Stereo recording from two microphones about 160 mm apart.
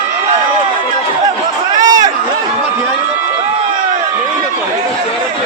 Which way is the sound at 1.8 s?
25° right (ahead or behind).